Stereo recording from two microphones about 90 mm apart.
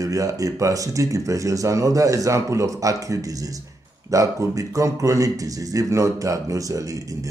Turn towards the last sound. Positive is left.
turn(degrees=-35)  # may be behind; listen again after turning